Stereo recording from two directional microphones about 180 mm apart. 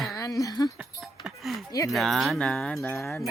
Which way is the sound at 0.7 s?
5° right (ahead or behind).